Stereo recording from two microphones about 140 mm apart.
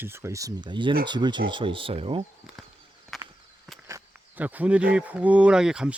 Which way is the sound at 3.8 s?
15° right (ahead or behind).